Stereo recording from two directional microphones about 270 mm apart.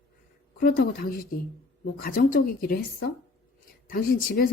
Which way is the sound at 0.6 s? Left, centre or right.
Left.